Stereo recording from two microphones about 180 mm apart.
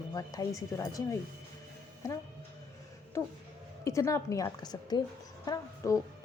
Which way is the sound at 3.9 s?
15° left (ahead or behind).